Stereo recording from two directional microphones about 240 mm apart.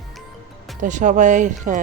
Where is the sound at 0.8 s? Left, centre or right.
Right.